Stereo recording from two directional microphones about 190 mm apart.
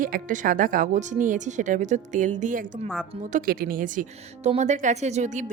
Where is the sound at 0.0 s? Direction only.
45° right (ahead or behind).